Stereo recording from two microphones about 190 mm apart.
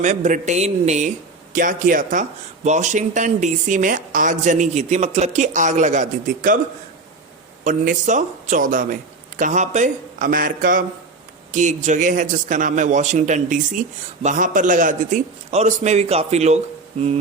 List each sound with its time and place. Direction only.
0.0 s speech: 40° right (ahead or behind)
7.6 s speech: 40° right (ahead or behind)